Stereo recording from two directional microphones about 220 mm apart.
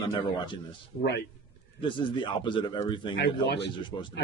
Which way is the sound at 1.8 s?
20° left (ahead or behind).